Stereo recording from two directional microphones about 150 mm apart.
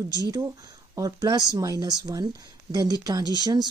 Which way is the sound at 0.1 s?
25° right (ahead or behind).